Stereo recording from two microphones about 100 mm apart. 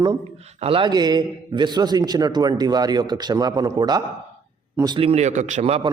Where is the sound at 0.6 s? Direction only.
65° right (ahead or behind).